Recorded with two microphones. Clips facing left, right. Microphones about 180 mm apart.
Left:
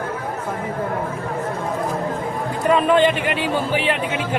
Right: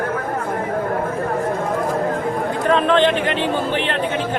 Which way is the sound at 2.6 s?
10° left (ahead or behind).